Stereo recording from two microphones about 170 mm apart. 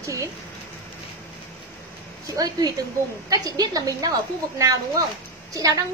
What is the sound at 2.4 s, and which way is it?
A woman's voice, 20° right (ahead or behind).